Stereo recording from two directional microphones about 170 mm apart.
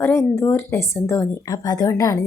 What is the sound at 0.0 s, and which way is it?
Speech, 15° left (ahead or behind).